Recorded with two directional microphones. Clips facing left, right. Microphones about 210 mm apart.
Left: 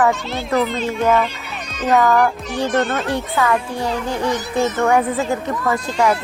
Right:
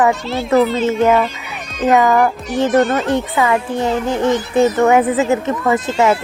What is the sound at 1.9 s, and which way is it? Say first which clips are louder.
A child's voice: right 2 dB; 15° right (ahead or behind).